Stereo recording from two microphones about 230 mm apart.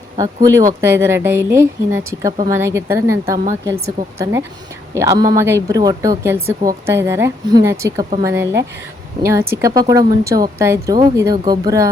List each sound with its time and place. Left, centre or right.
0.2 s speech: centre